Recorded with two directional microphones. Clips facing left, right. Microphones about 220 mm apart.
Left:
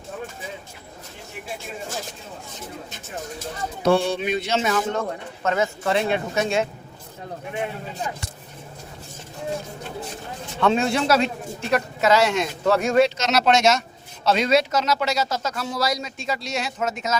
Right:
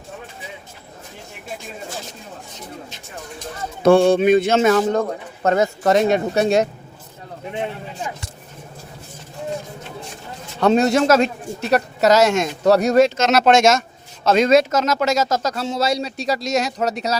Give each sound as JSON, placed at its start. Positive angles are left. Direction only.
{"t": 3.8, "sound": "a man's voice", "side_deg": -50}
{"t": 10.6, "sound": "a man's voice", "side_deg": -40}
{"t": 13.1, "sound": "speech", "side_deg": -50}
{"t": 15.5, "sound": "a man's voice", "side_deg": -25}